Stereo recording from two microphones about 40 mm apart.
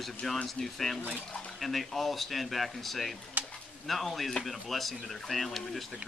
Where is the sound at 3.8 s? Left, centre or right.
Centre.